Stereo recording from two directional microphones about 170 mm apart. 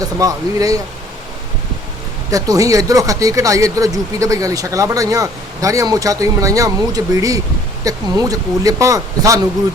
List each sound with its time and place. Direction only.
0.0 s speech: 20° right (ahead or behind)
2.3 s speech: 20° right (ahead or behind)